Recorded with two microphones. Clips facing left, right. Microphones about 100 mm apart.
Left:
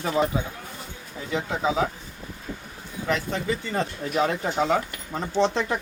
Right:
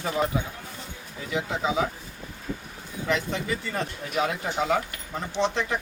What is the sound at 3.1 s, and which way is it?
Speech, 40° left (ahead or behind).